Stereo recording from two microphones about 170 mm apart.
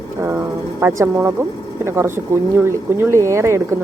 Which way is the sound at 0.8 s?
15° right (ahead or behind).